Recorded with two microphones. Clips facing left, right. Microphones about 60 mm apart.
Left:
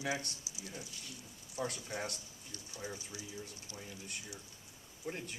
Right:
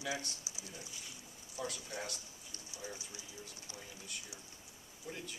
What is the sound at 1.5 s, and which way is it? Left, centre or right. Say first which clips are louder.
Speech: left 3 dB; left.